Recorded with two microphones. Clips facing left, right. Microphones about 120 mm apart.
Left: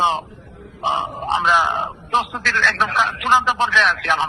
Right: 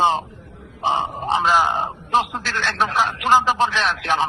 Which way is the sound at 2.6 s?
35° right (ahead or behind).